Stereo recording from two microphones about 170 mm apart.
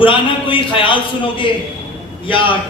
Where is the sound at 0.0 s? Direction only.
30° left (ahead or behind).